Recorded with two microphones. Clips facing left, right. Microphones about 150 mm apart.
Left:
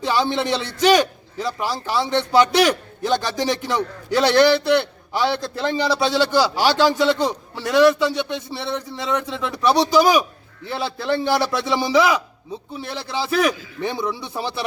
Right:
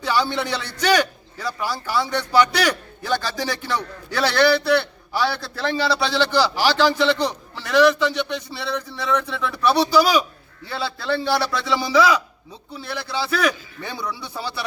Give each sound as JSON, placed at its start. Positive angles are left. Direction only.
{"t": 0.0, "sound": "a man's voice", "side_deg": 25}